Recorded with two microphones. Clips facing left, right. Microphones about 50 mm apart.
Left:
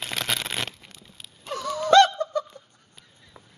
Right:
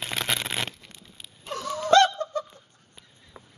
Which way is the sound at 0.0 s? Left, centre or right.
Centre.